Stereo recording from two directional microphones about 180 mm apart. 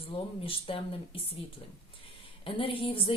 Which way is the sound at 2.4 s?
30° left (ahead or behind).